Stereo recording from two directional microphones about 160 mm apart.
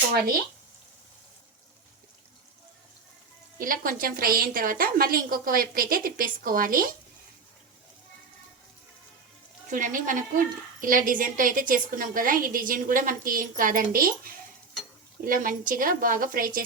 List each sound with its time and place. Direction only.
3.6 s a woman's voice: 60° right (ahead or behind)
9.6 s a woman's voice: 55° right (ahead or behind)